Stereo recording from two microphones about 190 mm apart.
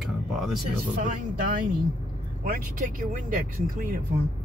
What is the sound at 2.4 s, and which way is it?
Speech, 50° right (ahead or behind).